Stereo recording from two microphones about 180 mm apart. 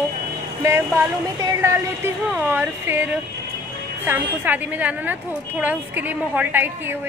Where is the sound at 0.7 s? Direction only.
15° right (ahead or behind).